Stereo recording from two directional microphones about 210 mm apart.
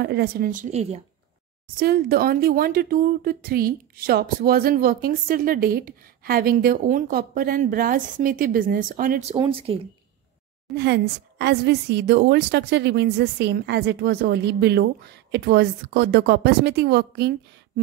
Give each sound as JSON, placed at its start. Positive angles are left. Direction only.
{"t": 0.0, "sound": "a woman's voice", "side_deg": -50}
{"t": 1.8, "sound": "speech", "side_deg": -45}
{"t": 9.3, "sound": "speech", "side_deg": -25}
{"t": 10.7, "sound": "speech", "side_deg": -50}